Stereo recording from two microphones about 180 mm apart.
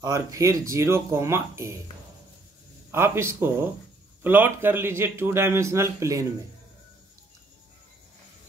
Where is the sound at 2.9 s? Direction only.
15° right (ahead or behind).